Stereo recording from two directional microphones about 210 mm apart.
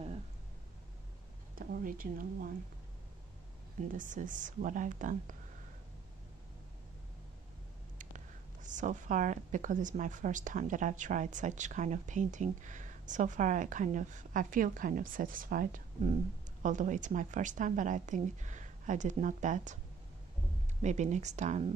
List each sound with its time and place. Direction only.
1.5 s speech: 45° right (ahead or behind)
3.9 s a woman's voice: 40° right (ahead or behind)
8.6 s a woman's voice: 35° right (ahead or behind)
20.8 s a woman's voice: 35° right (ahead or behind)